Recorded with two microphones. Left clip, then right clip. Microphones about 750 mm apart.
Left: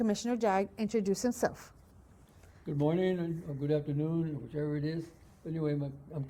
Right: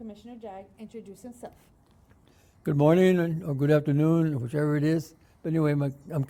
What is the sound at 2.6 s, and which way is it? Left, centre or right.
Speech, right.